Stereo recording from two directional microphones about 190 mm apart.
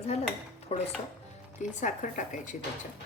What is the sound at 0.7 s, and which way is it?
Speech, 35° left (ahead or behind).